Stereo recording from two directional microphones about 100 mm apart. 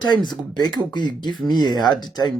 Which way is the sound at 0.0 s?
45° left (ahead or behind).